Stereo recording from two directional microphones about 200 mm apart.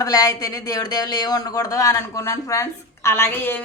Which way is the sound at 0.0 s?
15° left (ahead or behind).